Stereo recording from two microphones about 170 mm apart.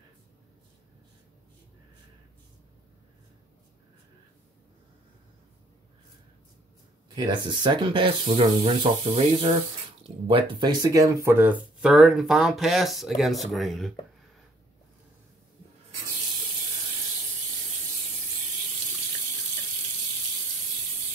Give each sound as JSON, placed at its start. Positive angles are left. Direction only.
{"t": 7.2, "sound": "speech", "side_deg": -25}